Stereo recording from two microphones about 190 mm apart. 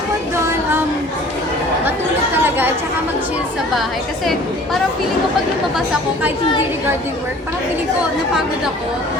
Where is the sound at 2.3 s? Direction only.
10° right (ahead or behind).